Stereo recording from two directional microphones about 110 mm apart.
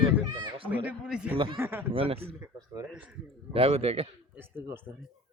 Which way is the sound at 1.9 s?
60° right (ahead or behind).